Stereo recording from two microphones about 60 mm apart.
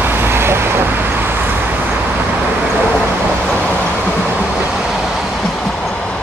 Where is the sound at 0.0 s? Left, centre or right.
Right.